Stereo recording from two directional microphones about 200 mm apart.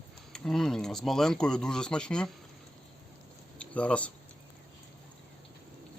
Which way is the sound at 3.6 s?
5° left (ahead or behind).